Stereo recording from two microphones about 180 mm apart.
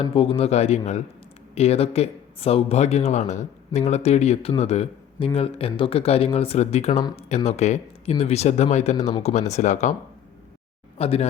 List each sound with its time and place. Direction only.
0.0 s speech: 30° left (ahead or behind)
10.9 s speech: 35° left (ahead or behind)